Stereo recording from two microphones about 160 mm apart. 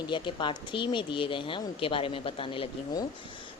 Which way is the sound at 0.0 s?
30° left (ahead or behind).